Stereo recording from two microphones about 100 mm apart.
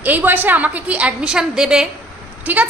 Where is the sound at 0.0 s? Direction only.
15° right (ahead or behind).